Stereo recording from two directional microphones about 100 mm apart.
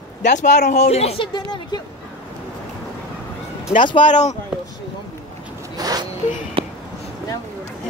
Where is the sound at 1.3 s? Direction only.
45° left (ahead or behind).